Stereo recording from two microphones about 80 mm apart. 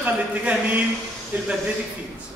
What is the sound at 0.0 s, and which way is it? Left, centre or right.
Speech, centre.